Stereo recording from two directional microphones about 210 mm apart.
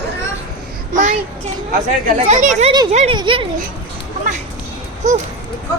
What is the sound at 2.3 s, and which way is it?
Speech, 35° right (ahead or behind).